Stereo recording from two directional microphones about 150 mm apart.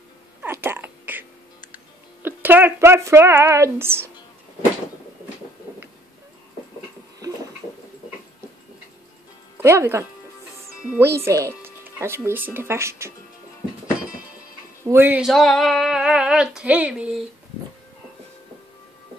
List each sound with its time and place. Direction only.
0.4 s a sound: 15° right (ahead or behind)
2.2 s speech: 15° right (ahead or behind)
9.6 s speech: 15° right (ahead or behind)
14.9 s speech: 15° right (ahead or behind)
15.2 s female singing: centre (ahead or behind)